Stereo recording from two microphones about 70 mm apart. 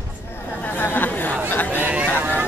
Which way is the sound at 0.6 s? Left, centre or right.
Left.